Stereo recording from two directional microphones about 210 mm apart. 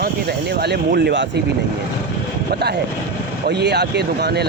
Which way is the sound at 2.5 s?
50° right (ahead or behind).